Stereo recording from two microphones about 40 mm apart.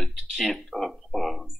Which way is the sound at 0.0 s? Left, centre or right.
Centre.